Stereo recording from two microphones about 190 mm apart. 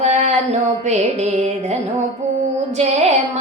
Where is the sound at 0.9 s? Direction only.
35° right (ahead or behind).